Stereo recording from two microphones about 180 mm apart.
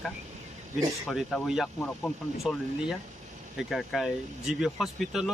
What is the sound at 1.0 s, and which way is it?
Speech, centre (ahead or behind).